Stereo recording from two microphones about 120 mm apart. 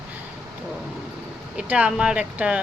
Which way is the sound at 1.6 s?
10° right (ahead or behind).